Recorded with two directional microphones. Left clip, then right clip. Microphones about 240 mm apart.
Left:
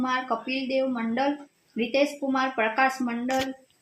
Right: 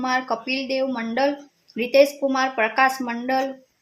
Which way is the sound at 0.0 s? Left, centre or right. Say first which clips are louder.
Right 4 dB; right.